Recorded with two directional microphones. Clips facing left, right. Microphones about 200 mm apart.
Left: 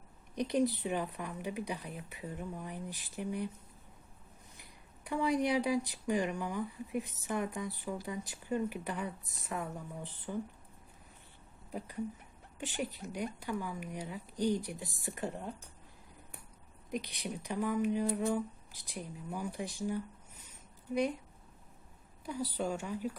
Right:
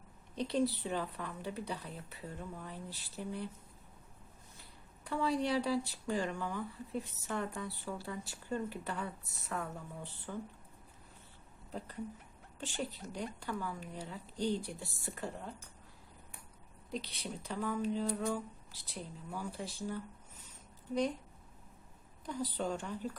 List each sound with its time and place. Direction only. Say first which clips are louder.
0.3 s speech: left 2 dB; 15° left (ahead or behind)
5.0 s speech: left 2 dB; 15° left (ahead or behind)
12.5 s speech: left 2 dB; 15° left (ahead or behind)
16.9 s speech: left 3 dB; 15° left (ahead or behind)
22.3 s speech: left 1 dB; 10° left (ahead or behind)